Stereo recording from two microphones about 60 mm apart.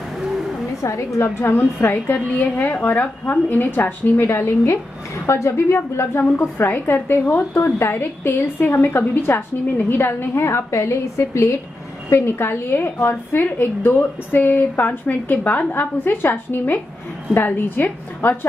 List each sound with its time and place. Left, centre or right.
0.8 s a woman's voice: left
1.4 s a woman's voice: left
7.5 s a woman's voice: left